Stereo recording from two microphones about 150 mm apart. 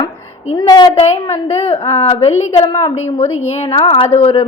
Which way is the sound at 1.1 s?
45° left (ahead or behind).